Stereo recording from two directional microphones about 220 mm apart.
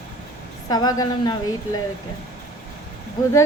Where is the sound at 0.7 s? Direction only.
15° left (ahead or behind).